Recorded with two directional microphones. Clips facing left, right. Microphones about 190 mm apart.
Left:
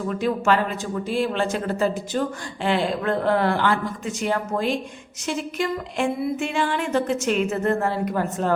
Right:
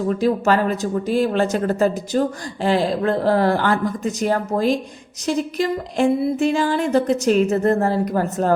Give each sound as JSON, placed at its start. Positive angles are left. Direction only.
{"t": 0.1, "sound": "speech", "side_deg": -35}